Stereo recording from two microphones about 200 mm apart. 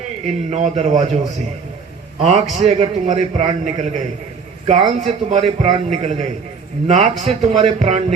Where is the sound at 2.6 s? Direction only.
35° right (ahead or behind).